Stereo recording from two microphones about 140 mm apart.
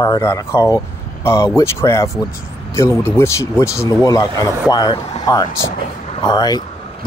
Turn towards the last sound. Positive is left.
turn(degrees=30)  # may be behind; listen again after turning